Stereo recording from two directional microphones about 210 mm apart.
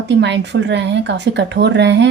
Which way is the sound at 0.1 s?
55° right (ahead or behind).